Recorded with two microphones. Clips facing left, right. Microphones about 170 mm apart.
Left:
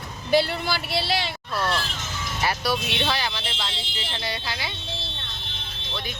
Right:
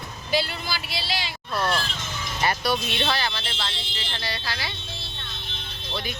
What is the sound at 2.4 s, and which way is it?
Speech, 5° left (ahead or behind).